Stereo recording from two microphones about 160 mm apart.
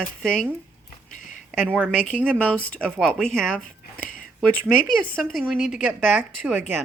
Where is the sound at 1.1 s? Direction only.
55° left (ahead or behind).